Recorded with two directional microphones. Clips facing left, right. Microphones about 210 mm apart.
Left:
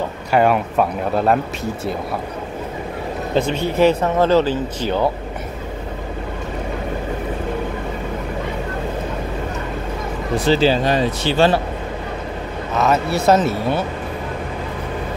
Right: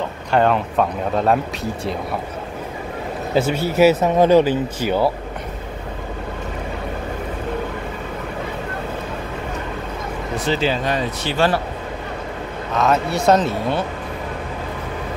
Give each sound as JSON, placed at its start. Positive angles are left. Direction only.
{"t": 0.3, "sound": "speech", "side_deg": 10}
{"t": 3.3, "sound": "speech", "side_deg": -5}
{"t": 10.4, "sound": "speech", "side_deg": 35}
{"t": 12.7, "sound": "speech", "side_deg": 5}